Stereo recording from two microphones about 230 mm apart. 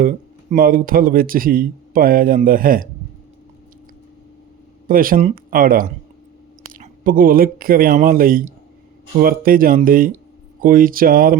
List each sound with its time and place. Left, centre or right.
0.5 s speech: right
4.9 s speech: right